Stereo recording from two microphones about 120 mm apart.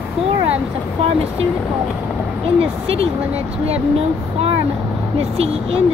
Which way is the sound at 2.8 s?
55° right (ahead or behind).